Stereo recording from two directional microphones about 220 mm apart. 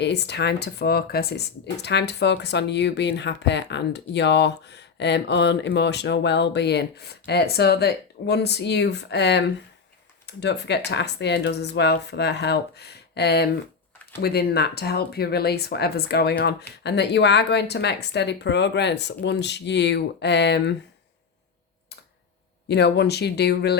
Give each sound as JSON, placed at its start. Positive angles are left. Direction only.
{"t": 0.0, "sound": "speech", "side_deg": 50}
{"t": 22.7, "sound": "speech", "side_deg": 50}